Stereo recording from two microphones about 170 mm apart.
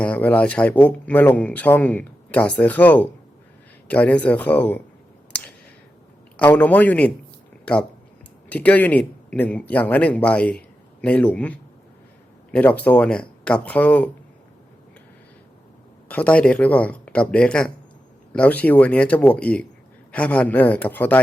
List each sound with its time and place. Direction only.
0.0 s speech: 10° left (ahead or behind)
6.3 s speech: 10° left (ahead or behind)
16.0 s speech: 10° left (ahead or behind)